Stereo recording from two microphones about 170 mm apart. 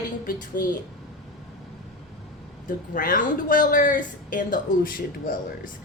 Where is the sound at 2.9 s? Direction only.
50° left (ahead or behind).